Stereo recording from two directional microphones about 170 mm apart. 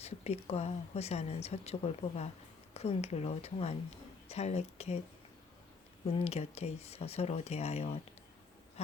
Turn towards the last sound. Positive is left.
turn(degrees=40)  # may be behind; listen again after turning